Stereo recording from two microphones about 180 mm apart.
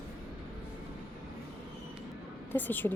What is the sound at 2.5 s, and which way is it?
Speech, 10° left (ahead or behind).